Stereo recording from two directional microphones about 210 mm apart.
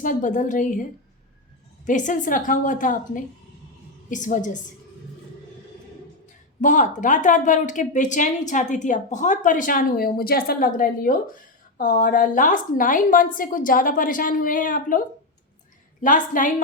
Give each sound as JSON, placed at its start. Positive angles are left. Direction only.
{"t": 0.0, "sound": "speech", "side_deg": 40}
{"t": 1.9, "sound": "speech", "side_deg": 35}
{"t": 6.6, "sound": "speech", "side_deg": 35}